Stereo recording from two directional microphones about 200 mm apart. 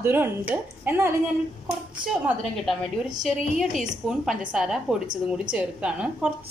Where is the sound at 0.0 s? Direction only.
10° right (ahead or behind).